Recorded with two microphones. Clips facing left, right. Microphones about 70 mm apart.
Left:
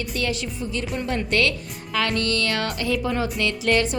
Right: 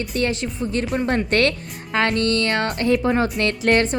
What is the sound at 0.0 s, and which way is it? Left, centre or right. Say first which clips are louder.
Speech: right 4 dB; right.